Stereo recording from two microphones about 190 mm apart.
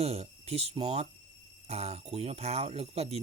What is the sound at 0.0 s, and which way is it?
Speech, 35° right (ahead or behind).